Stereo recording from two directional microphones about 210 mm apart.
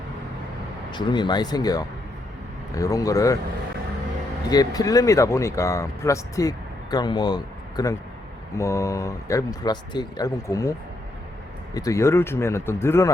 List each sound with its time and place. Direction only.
0.9 s speech: 20° left (ahead or behind)
4.4 s speech: 15° left (ahead or behind)